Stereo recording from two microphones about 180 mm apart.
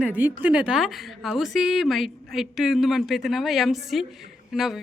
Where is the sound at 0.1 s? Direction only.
10° right (ahead or behind).